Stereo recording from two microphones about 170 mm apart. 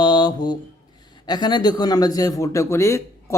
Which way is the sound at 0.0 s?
25° left (ahead or behind).